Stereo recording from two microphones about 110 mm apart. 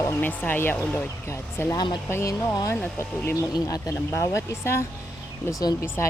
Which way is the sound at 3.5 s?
35° left (ahead or behind).